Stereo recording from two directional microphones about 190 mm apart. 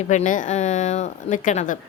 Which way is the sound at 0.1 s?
40° left (ahead or behind).